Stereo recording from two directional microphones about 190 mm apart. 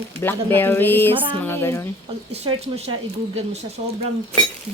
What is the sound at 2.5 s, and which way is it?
Speech, 25° right (ahead or behind).